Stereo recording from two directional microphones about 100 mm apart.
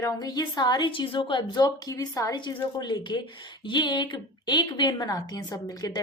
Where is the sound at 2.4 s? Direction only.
50° left (ahead or behind).